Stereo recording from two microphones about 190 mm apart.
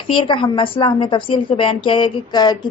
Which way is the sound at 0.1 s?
25° left (ahead or behind).